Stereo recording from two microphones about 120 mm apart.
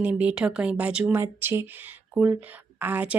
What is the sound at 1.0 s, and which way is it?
Speech, 20° right (ahead or behind).